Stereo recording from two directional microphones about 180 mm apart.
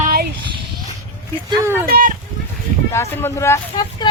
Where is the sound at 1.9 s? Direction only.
50° right (ahead or behind).